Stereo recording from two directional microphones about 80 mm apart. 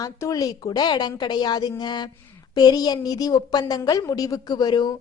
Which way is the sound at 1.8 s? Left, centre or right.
Left.